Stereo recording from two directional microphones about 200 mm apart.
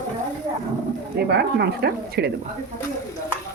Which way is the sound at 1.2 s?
55° right (ahead or behind).